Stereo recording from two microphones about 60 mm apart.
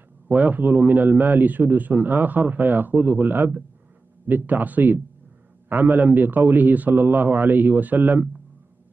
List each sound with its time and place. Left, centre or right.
0.3 s a man's voice: right